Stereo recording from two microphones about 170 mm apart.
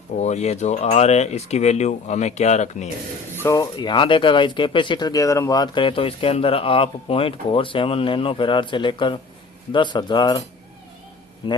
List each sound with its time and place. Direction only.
0.2 s speech: 40° left (ahead or behind)
3.4 s speech: 20° left (ahead or behind)
11.4 s speech: 30° left (ahead or behind)